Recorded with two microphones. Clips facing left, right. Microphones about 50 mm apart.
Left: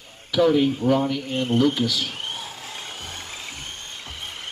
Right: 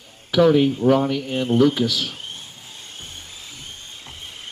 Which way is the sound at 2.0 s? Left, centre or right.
Left.